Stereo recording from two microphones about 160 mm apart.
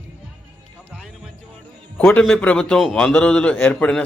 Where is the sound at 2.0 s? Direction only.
10° left (ahead or behind).